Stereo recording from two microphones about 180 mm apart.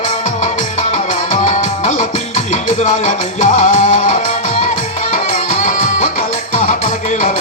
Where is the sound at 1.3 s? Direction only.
45° left (ahead or behind).